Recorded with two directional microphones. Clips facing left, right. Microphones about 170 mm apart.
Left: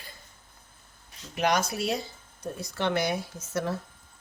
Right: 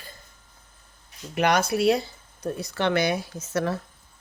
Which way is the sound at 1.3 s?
65° right (ahead or behind).